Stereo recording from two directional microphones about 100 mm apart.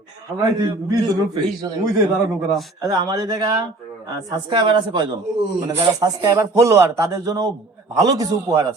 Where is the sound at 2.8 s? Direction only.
40° right (ahead or behind).